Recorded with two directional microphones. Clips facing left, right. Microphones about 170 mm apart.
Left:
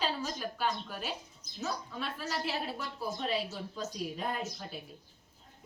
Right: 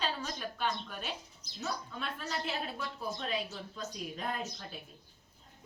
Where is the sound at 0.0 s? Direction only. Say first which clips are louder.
Left 2 dB; 10° left (ahead or behind).